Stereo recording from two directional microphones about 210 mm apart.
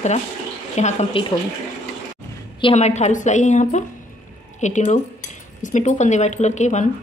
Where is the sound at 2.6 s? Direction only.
30° left (ahead or behind).